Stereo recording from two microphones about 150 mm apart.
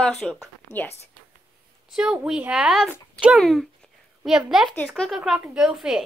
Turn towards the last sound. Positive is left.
turn(degrees=-5)  # may be behind; listen again after turning